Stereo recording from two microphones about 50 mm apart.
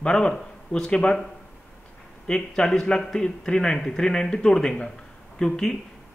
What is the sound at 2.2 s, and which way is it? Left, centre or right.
Speech, centre.